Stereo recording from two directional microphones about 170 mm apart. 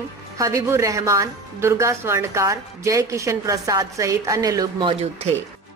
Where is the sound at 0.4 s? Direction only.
15° right (ahead or behind).